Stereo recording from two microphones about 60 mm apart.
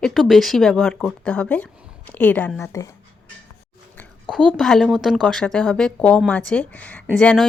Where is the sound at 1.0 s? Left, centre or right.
Left.